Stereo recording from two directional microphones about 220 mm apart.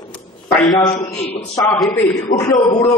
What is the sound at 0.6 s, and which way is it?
Speech, 20° left (ahead or behind).